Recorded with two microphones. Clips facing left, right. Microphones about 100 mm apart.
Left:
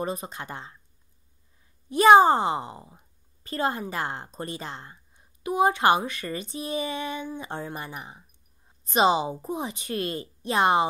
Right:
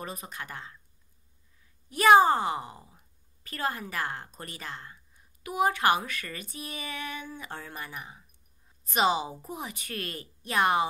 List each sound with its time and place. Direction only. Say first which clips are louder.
0.0 s a woman's voice: left 8 dB; 25° left (ahead or behind)
1.9 s a woman's voice: left 4 dB; 25° left (ahead or behind)